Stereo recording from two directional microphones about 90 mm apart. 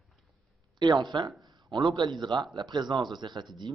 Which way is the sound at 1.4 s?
55° right (ahead or behind).